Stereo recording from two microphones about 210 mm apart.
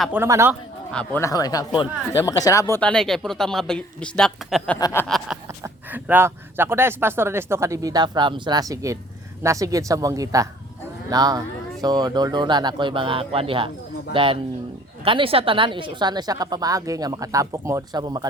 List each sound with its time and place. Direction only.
0.0 s speech: 10° right (ahead or behind)
0.9 s speech: 5° left (ahead or behind)
4.8 s a sound: 15° left (ahead or behind)
5.0 s speech: centre (ahead or behind)
5.6 s speech: 10° right (ahead or behind)